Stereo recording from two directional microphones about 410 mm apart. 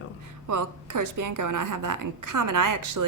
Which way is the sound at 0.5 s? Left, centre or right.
Right.